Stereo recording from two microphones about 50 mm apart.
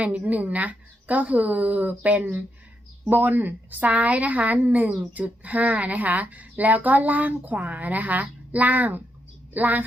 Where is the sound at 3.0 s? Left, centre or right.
Right.